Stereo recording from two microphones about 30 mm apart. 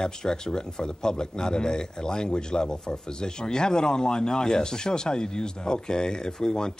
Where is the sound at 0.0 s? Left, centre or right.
Left.